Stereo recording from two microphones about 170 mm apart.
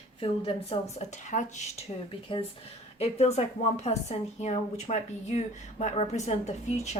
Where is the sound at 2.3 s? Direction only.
30° left (ahead or behind).